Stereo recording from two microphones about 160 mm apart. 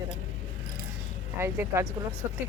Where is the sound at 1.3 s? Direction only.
15° right (ahead or behind).